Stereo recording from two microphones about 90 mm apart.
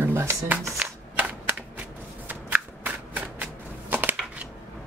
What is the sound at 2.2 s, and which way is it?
Shuffling cards, 20° right (ahead or behind).